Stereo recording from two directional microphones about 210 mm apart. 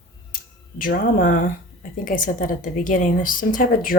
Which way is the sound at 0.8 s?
40° left (ahead or behind).